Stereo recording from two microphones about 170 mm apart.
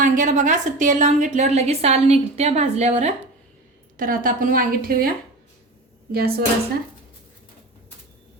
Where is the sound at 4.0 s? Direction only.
55° right (ahead or behind).